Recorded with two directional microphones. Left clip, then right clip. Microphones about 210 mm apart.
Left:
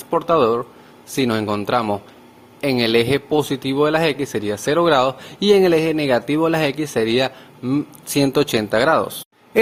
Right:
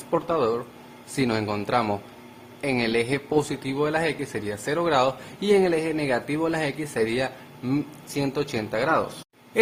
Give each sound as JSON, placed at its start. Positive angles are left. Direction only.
{"t": 0.1, "sound": "speech", "side_deg": 25}